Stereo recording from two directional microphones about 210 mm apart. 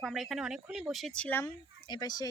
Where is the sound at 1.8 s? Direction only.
20° left (ahead or behind).